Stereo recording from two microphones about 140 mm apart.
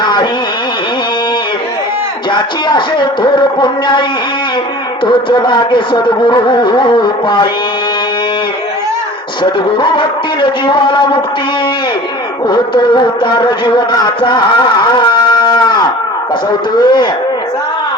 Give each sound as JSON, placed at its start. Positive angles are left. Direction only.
{"t": 0.0, "sound": "a sound", "side_deg": 30}
{"t": 2.3, "sound": "speech", "side_deg": 35}
{"t": 5.0, "sound": "speech", "side_deg": 30}
{"t": 9.4, "sound": "speech", "side_deg": 35}
{"t": 12.5, "sound": "music", "side_deg": 30}
{"t": 16.7, "sound": "speech", "side_deg": 30}